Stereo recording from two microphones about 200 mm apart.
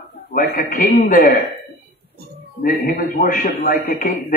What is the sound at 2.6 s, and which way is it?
Speech, 50° left (ahead or behind).